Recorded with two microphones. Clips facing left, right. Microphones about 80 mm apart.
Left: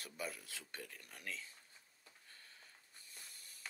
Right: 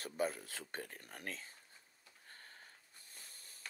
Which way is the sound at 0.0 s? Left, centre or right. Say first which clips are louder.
Right 8 dB; right.